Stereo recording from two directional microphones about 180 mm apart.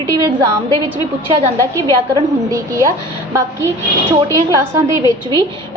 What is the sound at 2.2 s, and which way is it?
A woman's voice, 20° right (ahead or behind).